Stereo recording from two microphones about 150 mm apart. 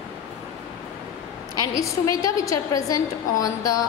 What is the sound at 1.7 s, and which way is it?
A woman's voice, 20° left (ahead or behind).